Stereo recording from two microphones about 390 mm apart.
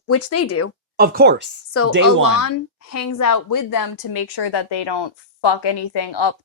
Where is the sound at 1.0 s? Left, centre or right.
Right.